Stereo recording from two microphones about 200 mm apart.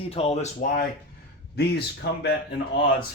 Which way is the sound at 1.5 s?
55° left (ahead or behind).